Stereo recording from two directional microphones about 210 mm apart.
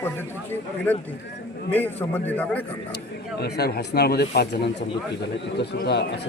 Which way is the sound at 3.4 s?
50° left (ahead or behind).